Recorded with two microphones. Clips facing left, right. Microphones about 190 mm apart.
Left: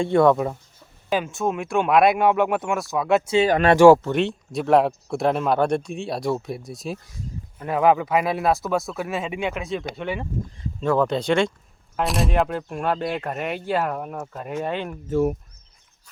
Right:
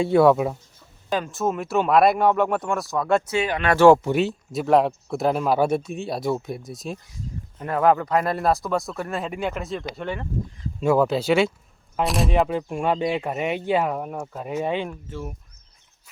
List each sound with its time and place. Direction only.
0.0 s speech: 5° right (ahead or behind)
4.0 s speech: 5° right (ahead or behind)
10.8 s speech: 10° right (ahead or behind)
15.1 s speech: 65° left (ahead or behind)